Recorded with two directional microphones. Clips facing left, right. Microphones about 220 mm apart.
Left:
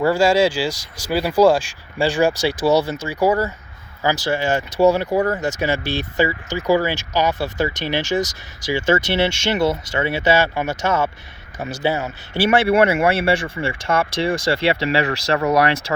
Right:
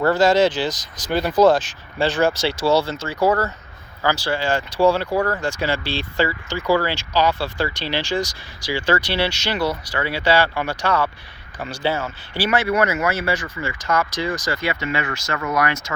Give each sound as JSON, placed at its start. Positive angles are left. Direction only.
{"t": 0.0, "sound": "speech", "side_deg": 10}